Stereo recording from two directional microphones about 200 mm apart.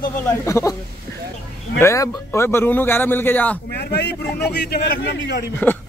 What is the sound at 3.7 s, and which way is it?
Speech, 55° left (ahead or behind).